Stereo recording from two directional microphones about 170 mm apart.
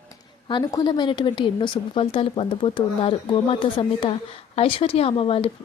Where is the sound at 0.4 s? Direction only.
25° left (ahead or behind).